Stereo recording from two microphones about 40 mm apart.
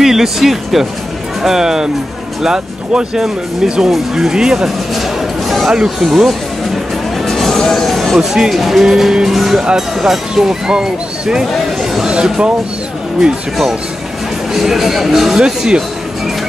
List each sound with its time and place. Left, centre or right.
0.0 s speech: centre
5.7 s speech: centre
7.2 s music: centre
8.2 s speech: centre
12.0 s a sound: right
14.5 s speech: centre